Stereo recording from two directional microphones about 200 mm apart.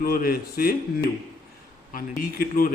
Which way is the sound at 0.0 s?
50° left (ahead or behind).